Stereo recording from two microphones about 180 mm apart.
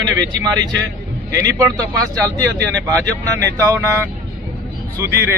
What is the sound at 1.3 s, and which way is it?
Speech, 15° right (ahead or behind).